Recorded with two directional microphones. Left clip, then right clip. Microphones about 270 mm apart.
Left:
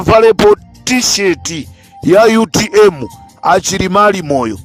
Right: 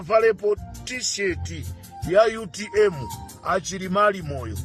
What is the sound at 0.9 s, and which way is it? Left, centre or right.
Speech, left.